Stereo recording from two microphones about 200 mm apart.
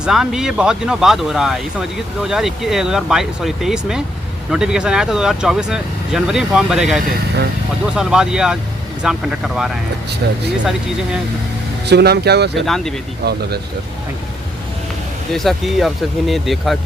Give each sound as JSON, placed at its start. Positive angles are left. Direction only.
{"t": 0.0, "sound": "speech", "side_deg": 0}
{"t": 10.2, "sound": "speech", "side_deg": -55}
{"t": 11.9, "sound": "speech", "side_deg": -55}
{"t": 12.6, "sound": "speech", "side_deg": 0}
{"t": 13.2, "sound": "speech", "side_deg": -55}
{"t": 15.3, "sound": "speech", "side_deg": 0}